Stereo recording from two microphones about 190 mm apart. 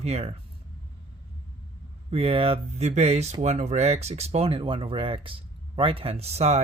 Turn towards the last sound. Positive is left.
turn(degrees=-35)  # may be behind; listen again after turning